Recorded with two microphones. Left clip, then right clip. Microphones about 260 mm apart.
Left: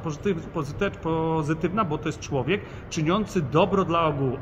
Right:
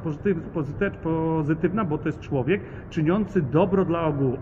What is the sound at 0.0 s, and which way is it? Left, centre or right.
A man's voice, centre.